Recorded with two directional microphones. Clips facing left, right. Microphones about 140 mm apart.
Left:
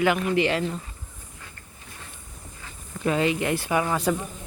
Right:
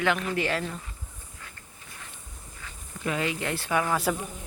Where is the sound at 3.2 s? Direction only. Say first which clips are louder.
Left 6 dB; 20° left (ahead or behind).